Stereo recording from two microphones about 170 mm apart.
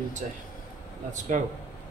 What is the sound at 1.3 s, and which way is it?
Speech, 45° right (ahead or behind).